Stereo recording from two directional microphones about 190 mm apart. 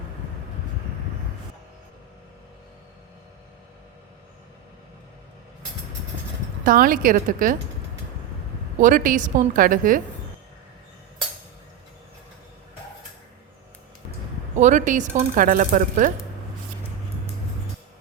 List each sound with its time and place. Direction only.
6.7 s speech: 45° right (ahead or behind)
8.8 s speech: 45° right (ahead or behind)
14.6 s speech: 40° right (ahead or behind)